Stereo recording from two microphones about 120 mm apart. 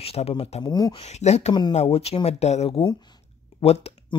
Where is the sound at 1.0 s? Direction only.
65° left (ahead or behind).